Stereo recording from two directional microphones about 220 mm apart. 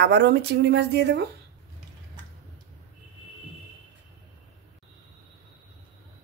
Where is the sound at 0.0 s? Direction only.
50° right (ahead or behind).